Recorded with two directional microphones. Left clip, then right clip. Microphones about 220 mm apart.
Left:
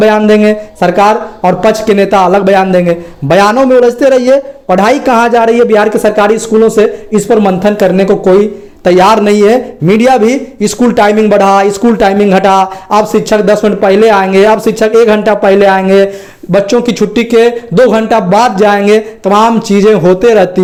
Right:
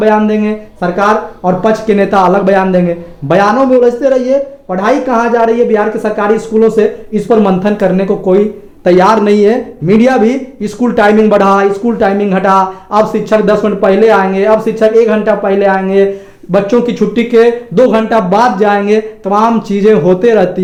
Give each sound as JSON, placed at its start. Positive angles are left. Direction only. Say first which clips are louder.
{"t": 0.0, "sound": "a man's voice", "louder": "left 4 dB", "side_deg": 30}